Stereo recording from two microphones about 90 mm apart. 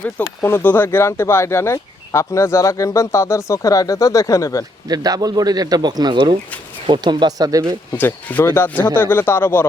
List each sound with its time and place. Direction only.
0.0 s speech: 25° left (ahead or behind)
4.9 s a man's voice: 45° right (ahead or behind)
7.9 s speech: 20° left (ahead or behind)